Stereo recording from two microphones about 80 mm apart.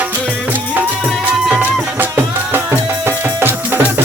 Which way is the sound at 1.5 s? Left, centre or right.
Right.